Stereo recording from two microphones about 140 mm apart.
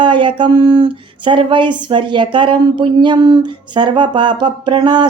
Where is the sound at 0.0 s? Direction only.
35° right (ahead or behind).